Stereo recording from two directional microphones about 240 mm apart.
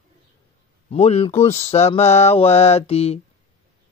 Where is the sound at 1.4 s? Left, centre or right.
Left.